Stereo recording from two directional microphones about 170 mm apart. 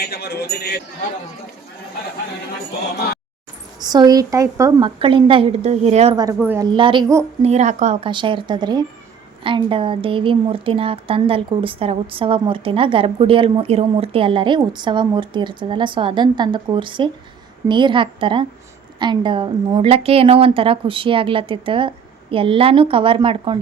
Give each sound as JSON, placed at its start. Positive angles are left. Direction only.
{"t": 0.0, "sound": "speech", "side_deg": 70}
{"t": 3.8, "sound": "a woman's voice", "side_deg": -25}
{"t": 4.9, "sound": "a woman's voice", "side_deg": -30}
{"t": 6.4, "sound": "a woman's voice", "side_deg": -10}
{"t": 6.7, "sound": "a woman's voice", "side_deg": -30}
{"t": 7.4, "sound": "speech", "side_deg": -40}
{"t": 8.0, "sound": "a woman's voice", "side_deg": -30}